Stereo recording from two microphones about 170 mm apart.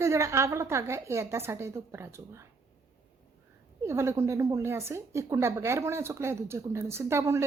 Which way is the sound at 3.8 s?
15° right (ahead or behind).